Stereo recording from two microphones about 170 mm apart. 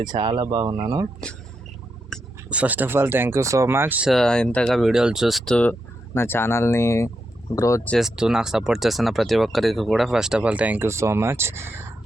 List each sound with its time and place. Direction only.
0.0 s speech: 25° right (ahead or behind)
2.1 s a sound: 5° left (ahead or behind)
2.5 s speech: 10° right (ahead or behind); by 7.8 s 20° left (ahead or behind)
7.9 s speech: centre (ahead or behind)